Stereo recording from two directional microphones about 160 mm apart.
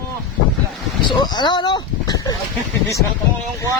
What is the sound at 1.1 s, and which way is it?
Speech, 30° left (ahead or behind).